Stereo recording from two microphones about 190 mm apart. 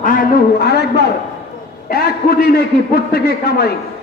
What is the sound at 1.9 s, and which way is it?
A man's voice, 55° left (ahead or behind).